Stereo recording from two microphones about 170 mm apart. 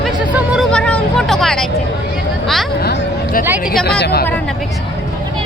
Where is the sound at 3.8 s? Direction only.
75° left (ahead or behind).